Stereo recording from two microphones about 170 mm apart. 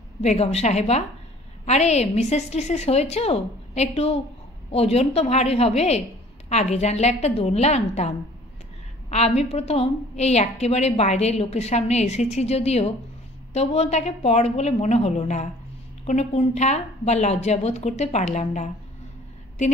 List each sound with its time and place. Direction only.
0.2 s a woman's voice: 40° left (ahead or behind)
9.1 s a woman's voice: 40° left (ahead or behind)